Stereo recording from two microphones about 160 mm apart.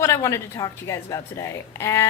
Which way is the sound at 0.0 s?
20° left (ahead or behind).